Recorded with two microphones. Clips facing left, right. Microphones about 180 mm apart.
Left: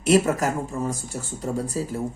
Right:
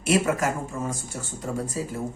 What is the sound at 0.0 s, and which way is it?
Speech, 40° left (ahead or behind).